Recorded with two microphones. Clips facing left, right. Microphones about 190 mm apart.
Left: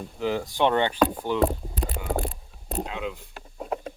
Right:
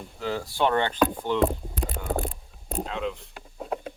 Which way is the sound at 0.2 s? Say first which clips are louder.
Left 2 dB; 15° left (ahead or behind).